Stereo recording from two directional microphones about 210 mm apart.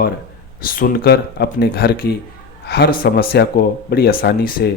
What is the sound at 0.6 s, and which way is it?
Speech, 45° left (ahead or behind).